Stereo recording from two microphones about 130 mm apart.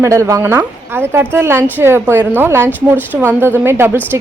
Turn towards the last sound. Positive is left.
turn(degrees=-15)  # may be behind; listen again after turning